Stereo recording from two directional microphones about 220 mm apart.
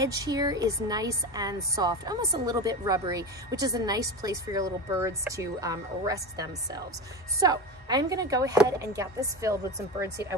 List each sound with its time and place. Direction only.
0.0 s speech: 15° right (ahead or behind)